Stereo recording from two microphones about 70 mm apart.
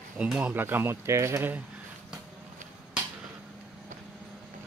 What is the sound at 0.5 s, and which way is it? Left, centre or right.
Speech, right.